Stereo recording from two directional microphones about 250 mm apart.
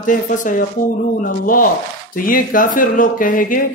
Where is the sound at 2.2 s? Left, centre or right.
Left.